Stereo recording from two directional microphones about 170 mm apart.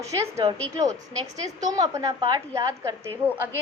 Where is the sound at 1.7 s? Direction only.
20° right (ahead or behind).